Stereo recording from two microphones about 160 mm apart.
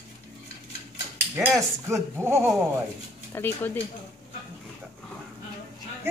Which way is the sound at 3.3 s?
15° left (ahead or behind).